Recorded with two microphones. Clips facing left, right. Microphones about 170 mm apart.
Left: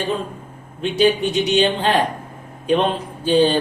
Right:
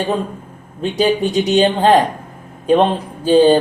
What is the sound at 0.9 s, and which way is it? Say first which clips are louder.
Speech: right 1 dB; 40° right (ahead or behind).